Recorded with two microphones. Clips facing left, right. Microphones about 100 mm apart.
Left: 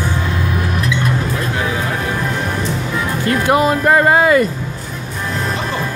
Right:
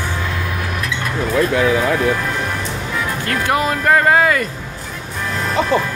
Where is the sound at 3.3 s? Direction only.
20° left (ahead or behind).